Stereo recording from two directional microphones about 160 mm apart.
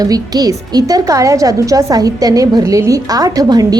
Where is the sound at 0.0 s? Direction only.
25° right (ahead or behind).